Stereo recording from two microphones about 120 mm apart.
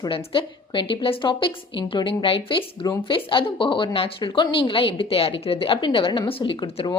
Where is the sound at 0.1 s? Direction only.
45° left (ahead or behind).